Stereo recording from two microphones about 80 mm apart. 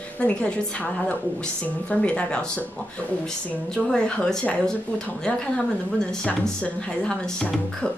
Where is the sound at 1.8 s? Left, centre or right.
Centre.